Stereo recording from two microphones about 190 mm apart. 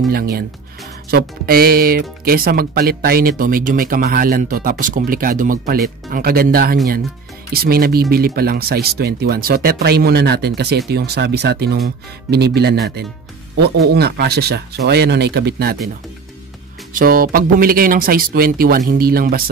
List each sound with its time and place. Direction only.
0.1 s speech: 55° right (ahead or behind)
16.9 s speech: 50° right (ahead or behind)